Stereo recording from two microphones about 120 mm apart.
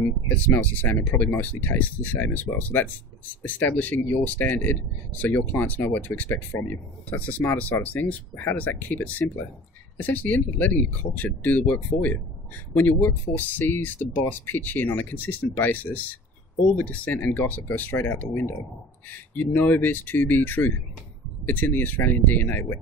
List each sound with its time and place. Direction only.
0.4 s speech: 15° left (ahead or behind)
13.4 s speech: 15° left (ahead or behind)